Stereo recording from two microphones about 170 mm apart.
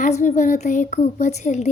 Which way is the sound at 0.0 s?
45° left (ahead or behind).